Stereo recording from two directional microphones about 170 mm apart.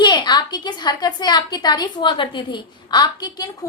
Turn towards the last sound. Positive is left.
turn(degrees=25)  # may be behind; listen again after turning